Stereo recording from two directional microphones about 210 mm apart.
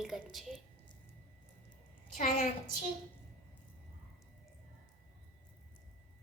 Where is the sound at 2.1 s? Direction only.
40° left (ahead or behind).